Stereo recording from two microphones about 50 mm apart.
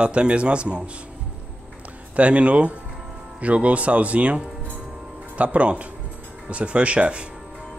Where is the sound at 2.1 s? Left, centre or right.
Right.